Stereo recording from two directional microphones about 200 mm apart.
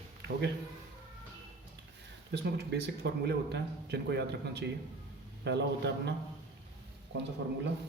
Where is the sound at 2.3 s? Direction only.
55° right (ahead or behind).